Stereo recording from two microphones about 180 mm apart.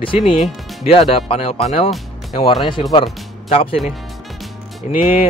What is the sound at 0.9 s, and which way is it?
Speech, 30° left (ahead or behind).